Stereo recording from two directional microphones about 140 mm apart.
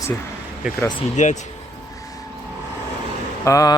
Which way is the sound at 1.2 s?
60° left (ahead or behind).